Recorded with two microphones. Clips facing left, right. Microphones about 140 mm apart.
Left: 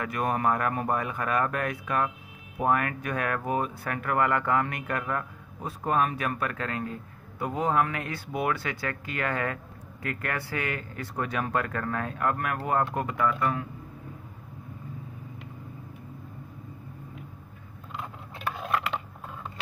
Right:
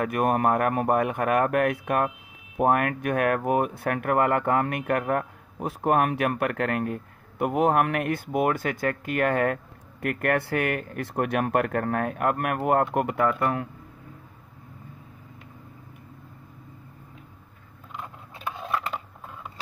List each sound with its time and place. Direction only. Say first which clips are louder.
0.0 s a man's voice: right 4 dB; 55° right (ahead or behind)